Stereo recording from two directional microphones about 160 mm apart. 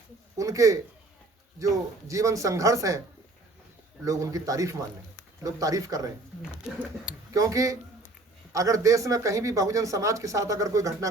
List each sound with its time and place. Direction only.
0.3 s speech: 20° right (ahead or behind)
4.0 s speech: 20° right (ahead or behind)
6.7 s speech: 5° right (ahead or behind)
7.3 s speech: 20° right (ahead or behind)